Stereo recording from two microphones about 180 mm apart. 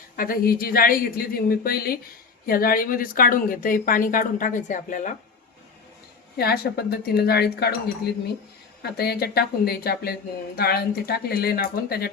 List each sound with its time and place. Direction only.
0.2 s a woman's voice: 55° left (ahead or behind)
6.3 s a woman's voice: 60° left (ahead or behind)
8.8 s a woman's voice: 60° left (ahead or behind)